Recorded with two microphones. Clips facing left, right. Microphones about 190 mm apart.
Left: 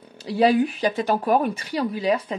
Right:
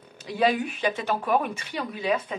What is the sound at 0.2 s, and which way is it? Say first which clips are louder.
Speech: left 6 dB; 35° left (ahead or behind).